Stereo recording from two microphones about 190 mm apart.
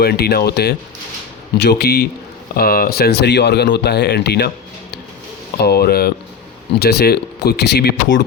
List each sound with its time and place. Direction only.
0.0 s speech: 55° left (ahead or behind)